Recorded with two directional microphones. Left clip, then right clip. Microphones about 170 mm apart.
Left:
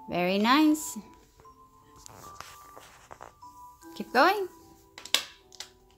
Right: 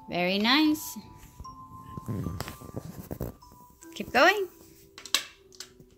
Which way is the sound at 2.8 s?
90° right.